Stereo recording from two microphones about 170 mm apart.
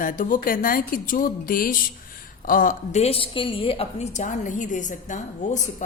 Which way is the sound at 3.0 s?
35° left (ahead or behind).